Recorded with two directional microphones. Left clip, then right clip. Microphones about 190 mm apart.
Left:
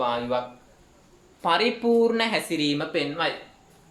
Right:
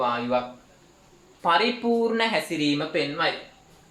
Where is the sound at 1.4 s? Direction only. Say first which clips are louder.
Right 1 dB; 45° left (ahead or behind).